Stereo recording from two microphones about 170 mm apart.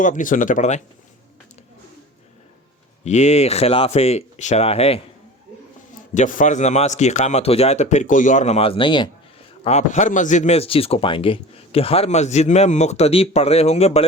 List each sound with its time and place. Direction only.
0.0 s speech: 50° left (ahead or behind)
3.0 s speech: 40° left (ahead or behind)
6.1 s speech: 50° left (ahead or behind); by 9.0 s 30° left (ahead or behind)
9.6 s speech: 40° left (ahead or behind)